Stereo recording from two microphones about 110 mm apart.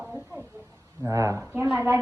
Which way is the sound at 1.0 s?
30° right (ahead or behind).